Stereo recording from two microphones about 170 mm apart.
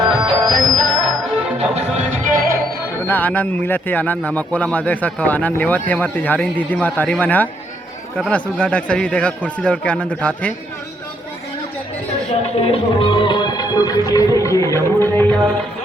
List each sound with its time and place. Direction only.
0.0 s music: 30° right (ahead or behind)
0.4 s music: centre (ahead or behind)
1.7 s music: 45° right (ahead or behind)
3.1 s speech: 10° left (ahead or behind)
12.5 s music: 35° left (ahead or behind); by 15.5 s 5° left (ahead or behind)